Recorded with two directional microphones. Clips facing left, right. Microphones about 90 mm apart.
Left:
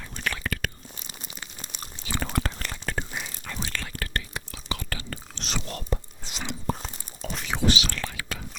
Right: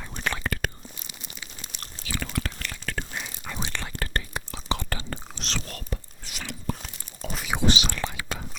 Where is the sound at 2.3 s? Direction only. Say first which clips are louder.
Left 2 dB; 35° left (ahead or behind).